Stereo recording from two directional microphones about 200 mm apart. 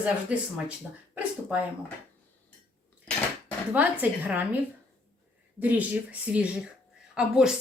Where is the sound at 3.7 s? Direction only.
10° right (ahead or behind).